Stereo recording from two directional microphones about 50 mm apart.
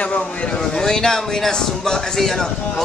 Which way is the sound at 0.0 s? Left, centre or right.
Left.